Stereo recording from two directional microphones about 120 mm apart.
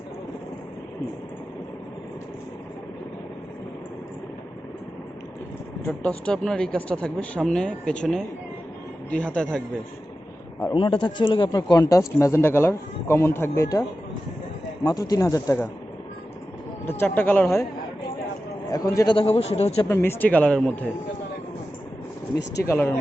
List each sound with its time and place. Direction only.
5.8 s speech: 15° left (ahead or behind)
10.8 s speech: 45° left (ahead or behind); by 13.7 s 20° left (ahead or behind)
14.8 s speech: 30° left (ahead or behind)
17.0 s speech: 15° left (ahead or behind)
18.7 s speech: 30° left (ahead or behind)
19.1 s speech: 55° left (ahead or behind)
19.9 s speech: 20° left (ahead or behind)
22.6 s speech: 20° left (ahead or behind)